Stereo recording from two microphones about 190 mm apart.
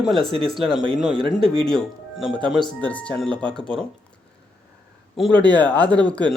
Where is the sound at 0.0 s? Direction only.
Centre (ahead or behind).